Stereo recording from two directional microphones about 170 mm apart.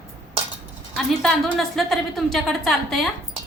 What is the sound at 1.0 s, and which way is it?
A woman's voice, centre (ahead or behind).